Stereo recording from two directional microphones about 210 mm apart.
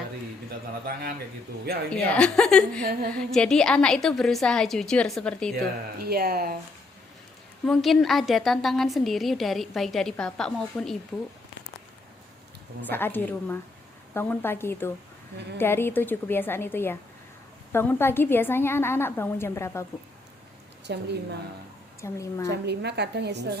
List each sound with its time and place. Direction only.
1.9 s a woman's voice: 5° left (ahead or behind)
6.0 s a woman's voice: 45° right (ahead or behind)
7.6 s a woman's voice: centre (ahead or behind)
12.8 s a woman's voice: 10° left (ahead or behind)
20.8 s a woman's voice: 50° right (ahead or behind)
22.0 s a woman's voice: 15° left (ahead or behind)
22.4 s a woman's voice: 55° right (ahead or behind)